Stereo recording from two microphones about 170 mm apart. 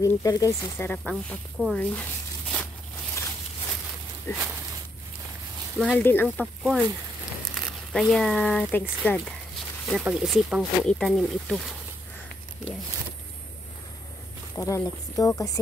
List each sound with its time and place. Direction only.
0.0 s speech: 20° left (ahead or behind)
4.3 s speech: 15° left (ahead or behind)
5.8 s speech: 5° left (ahead or behind)
14.5 s speech: 15° left (ahead or behind)